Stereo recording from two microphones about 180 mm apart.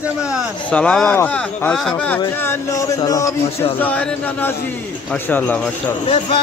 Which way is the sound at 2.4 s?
20° left (ahead or behind).